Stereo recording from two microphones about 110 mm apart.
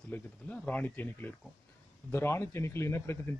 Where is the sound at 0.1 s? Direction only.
15° left (ahead or behind).